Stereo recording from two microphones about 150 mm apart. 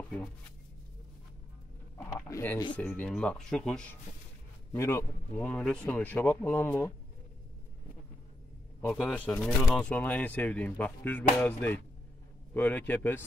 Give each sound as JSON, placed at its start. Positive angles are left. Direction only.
{"t": 2.0, "sound": "a sound", "side_deg": 20}
{"t": 2.8, "sound": "speech", "side_deg": 10}
{"t": 4.7, "sound": "speech", "side_deg": 20}
{"t": 8.9, "sound": "speech", "side_deg": 10}